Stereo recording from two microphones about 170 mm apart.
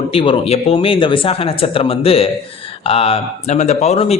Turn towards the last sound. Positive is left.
turn(degrees=35)  # may be behind; listen again after turning